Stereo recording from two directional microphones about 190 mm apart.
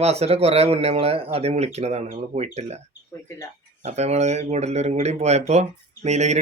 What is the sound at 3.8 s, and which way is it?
Speech, 35° right (ahead or behind).